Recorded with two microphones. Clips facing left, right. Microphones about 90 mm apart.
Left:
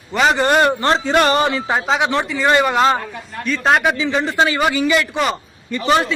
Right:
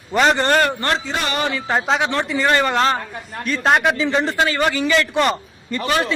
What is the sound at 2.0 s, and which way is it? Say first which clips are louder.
A man's voice: left 2 dB; 15° left (ahead or behind).